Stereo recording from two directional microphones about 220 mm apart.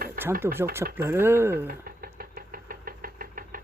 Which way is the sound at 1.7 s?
40° right (ahead or behind).